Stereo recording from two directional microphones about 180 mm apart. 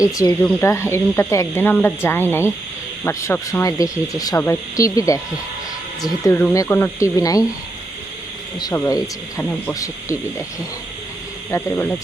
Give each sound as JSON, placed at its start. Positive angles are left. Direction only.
{"t": 0.0, "sound": "speech", "side_deg": 20}
{"t": 8.5, "sound": "speech", "side_deg": 20}
{"t": 9.4, "sound": "speech", "side_deg": 10}
{"t": 11.5, "sound": "speech", "side_deg": 10}